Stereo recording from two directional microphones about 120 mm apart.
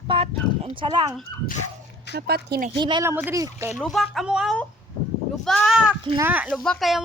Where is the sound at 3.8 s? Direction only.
Centre (ahead or behind).